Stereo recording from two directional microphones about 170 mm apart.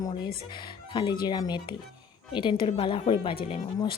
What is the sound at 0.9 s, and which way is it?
Speech, 25° left (ahead or behind).